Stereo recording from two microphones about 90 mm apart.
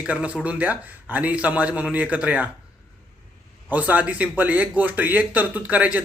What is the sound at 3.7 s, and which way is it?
A man's voice, 20° right (ahead or behind).